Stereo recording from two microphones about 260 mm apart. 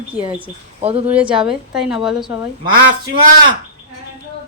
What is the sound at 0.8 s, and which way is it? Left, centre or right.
Speech, right.